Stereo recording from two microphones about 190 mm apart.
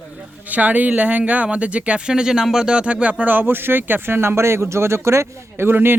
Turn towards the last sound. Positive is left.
turn(degrees=-10)  # may be behind; listen again after turning